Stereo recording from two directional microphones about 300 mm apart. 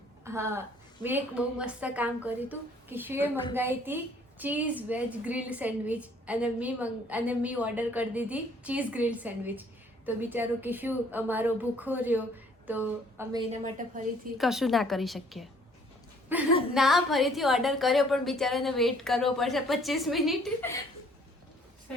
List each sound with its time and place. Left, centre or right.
0.3 s a woman's voice: centre
13.5 s a woman's voice: right
14.3 s a woman's voice: centre
16.5 s speech: centre
16.7 s a woman's voice: centre